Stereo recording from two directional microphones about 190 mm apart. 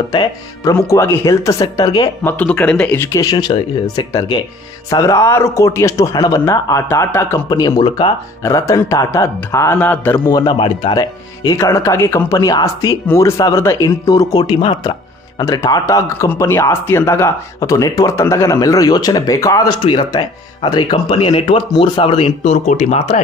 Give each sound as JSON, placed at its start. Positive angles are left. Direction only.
{"t": 0.1, "sound": "speech", "side_deg": 25}
{"t": 2.2, "sound": "speech", "side_deg": 10}
{"t": 10.6, "sound": "speech", "side_deg": 25}